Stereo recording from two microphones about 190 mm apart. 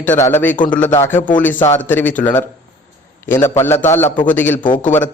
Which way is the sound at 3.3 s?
15° left (ahead or behind).